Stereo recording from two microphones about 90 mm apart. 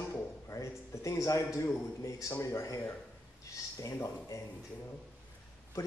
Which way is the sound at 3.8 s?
35° left (ahead or behind).